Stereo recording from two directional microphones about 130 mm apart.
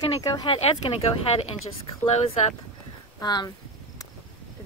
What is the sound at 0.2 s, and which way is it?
Speech, 25° left (ahead or behind).